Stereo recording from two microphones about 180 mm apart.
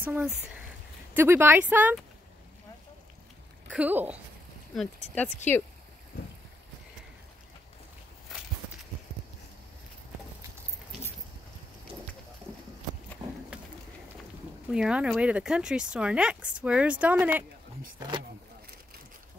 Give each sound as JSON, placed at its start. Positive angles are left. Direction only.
{"t": 0.0, "sound": "a woman's voice", "side_deg": -10}
{"t": 3.7, "sound": "a woman's voice", "side_deg": -10}
{"t": 4.7, "sound": "speech", "side_deg": 10}
{"t": 13.2, "sound": "a sound", "side_deg": -25}
{"t": 14.7, "sound": "speech", "side_deg": -5}